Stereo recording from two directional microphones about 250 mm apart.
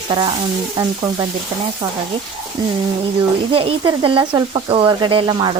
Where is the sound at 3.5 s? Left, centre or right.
Right.